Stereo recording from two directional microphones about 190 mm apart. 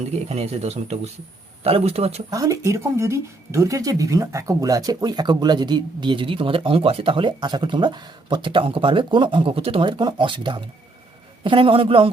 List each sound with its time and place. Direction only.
0.0 s speech: 35° right (ahead or behind)
2.3 s speech: 15° right (ahead or behind)